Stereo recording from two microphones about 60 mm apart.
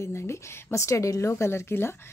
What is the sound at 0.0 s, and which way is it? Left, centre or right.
Speech, left.